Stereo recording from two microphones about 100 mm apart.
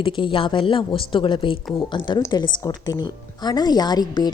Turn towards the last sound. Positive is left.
turn(degrees=45)  # may be behind; listen again after turning